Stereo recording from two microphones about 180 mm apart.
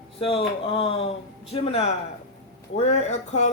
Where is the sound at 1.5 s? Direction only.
35° left (ahead or behind).